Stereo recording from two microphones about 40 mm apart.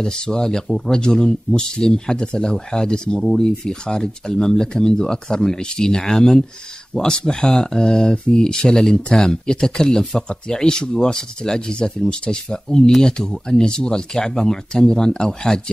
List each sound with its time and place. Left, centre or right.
0.0 s speech: centre